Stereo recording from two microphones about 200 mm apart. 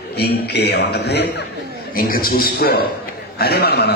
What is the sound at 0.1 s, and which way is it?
A man's voice, 55° left (ahead or behind).